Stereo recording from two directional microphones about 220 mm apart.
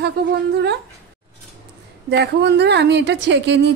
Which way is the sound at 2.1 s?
50° right (ahead or behind).